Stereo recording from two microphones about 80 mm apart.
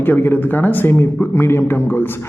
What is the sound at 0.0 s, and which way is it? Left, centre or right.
Speech, left.